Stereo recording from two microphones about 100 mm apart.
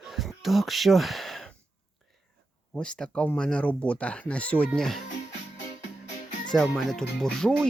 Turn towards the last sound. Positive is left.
turn(degrees=5)  # may be behind; listen again after turning